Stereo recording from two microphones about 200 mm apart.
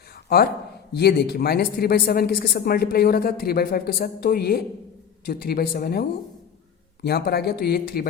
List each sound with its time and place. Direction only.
0.9 s speech: 55° left (ahead or behind)